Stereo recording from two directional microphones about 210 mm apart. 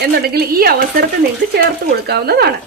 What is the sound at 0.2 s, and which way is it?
A woman's voice, 45° right (ahead or behind).